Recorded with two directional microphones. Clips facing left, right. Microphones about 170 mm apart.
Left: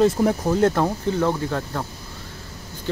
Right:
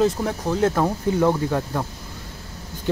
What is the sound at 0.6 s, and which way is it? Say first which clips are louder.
Speech: left 1 dB; 5° right (ahead or behind).